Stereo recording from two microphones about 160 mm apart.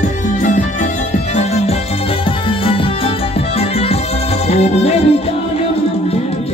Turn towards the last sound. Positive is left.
turn(degrees=40)  # may be behind; listen again after turning